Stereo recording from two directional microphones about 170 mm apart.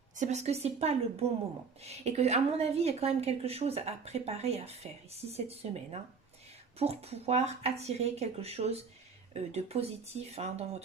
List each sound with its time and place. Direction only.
0.2 s a woman's voice: 40° right (ahead or behind)